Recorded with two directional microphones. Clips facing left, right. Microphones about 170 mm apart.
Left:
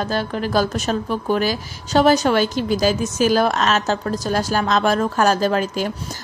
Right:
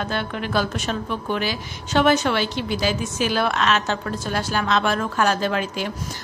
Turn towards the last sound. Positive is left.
turn(degrees=40)  # may be behind; listen again after turning